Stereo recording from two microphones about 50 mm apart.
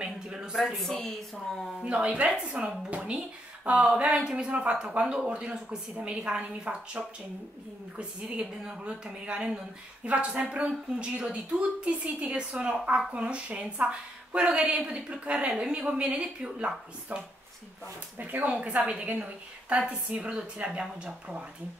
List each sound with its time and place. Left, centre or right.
0.0 s a sound: centre
0.7 s a woman's voice: centre
1.8 s speech: right
4.1 s a woman's voice: centre
4.5 s a woman's voice: right
18.1 s speech: right
18.5 s speech: right